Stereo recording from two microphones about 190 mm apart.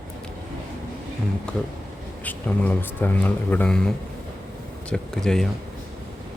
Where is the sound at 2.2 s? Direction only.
10° left (ahead or behind).